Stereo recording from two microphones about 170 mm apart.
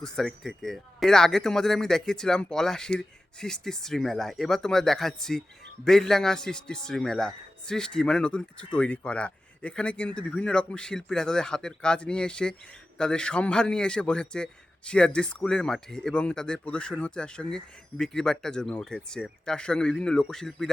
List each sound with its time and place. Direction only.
0.0 s a man's voice: 5° left (ahead or behind)